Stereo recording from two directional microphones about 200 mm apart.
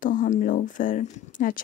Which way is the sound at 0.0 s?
40° left (ahead or behind).